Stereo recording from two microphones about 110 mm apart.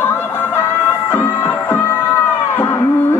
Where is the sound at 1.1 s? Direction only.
20° left (ahead or behind).